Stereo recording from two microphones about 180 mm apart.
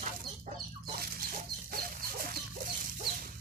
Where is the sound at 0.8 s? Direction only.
55° right (ahead or behind).